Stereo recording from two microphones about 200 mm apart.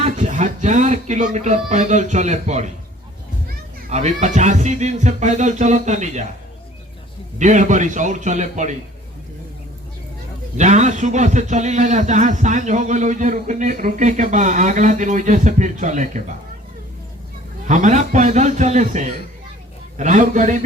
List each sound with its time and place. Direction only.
0.0 s a man's voice: 35° right (ahead or behind)
3.8 s a man's voice: 35° right (ahead or behind)
7.3 s a man's voice: 40° right (ahead or behind)
10.6 s a man's voice: 35° right (ahead or behind)
17.7 s a man's voice: 35° right (ahead or behind)